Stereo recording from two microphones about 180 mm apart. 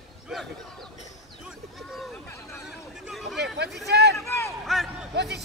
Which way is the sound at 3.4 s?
70° right (ahead or behind).